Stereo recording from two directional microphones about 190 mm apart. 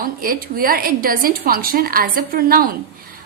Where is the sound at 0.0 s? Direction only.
50° right (ahead or behind).